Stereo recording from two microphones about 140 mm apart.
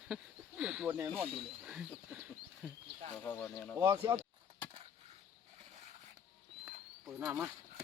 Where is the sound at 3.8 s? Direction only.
20° right (ahead or behind).